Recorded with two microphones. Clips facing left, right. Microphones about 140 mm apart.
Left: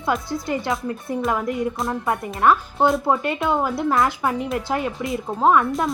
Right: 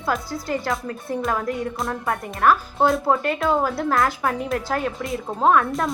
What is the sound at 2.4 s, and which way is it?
Speech, 20° left (ahead or behind).